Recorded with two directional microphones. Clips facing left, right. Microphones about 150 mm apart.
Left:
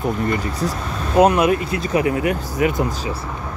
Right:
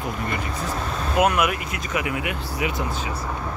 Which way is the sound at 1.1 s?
30° left (ahead or behind).